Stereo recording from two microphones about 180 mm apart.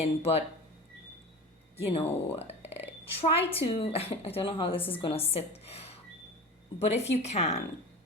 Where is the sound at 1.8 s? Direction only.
35° left (ahead or behind).